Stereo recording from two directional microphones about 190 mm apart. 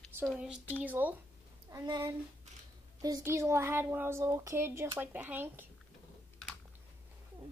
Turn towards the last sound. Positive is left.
turn(degrees=-10)  # may be behind; listen again after turning